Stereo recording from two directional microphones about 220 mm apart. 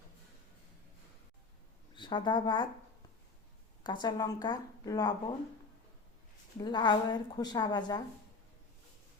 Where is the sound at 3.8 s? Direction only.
20° left (ahead or behind).